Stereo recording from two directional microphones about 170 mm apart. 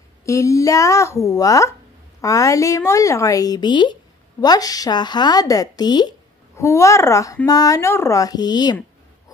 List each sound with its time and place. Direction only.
0.2 s a woman's voice: 20° left (ahead or behind)